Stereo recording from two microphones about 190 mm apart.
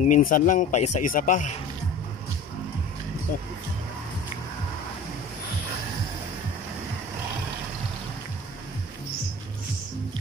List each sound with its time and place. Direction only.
0.0 s speech: 40° left (ahead or behind)